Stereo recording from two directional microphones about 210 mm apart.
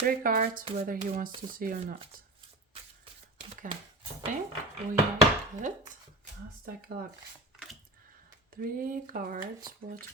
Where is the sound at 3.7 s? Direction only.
40° right (ahead or behind).